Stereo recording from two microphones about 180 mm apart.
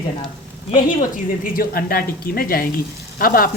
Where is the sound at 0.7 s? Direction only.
50° left (ahead or behind).